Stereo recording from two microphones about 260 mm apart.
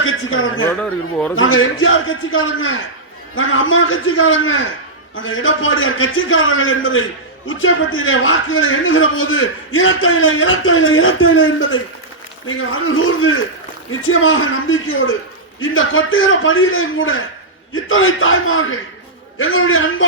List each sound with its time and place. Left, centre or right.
0.0 s a man's voice: left